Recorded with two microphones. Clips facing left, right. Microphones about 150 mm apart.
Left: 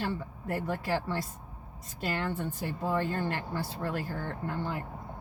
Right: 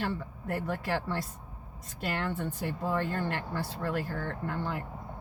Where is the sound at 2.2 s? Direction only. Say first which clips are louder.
Even; 5° left (ahead or behind).